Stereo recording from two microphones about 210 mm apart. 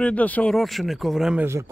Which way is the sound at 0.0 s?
5° left (ahead or behind).